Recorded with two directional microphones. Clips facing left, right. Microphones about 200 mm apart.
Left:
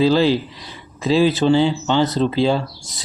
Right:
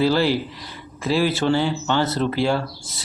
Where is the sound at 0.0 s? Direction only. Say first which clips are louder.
Left 4 dB; 20° left (ahead or behind).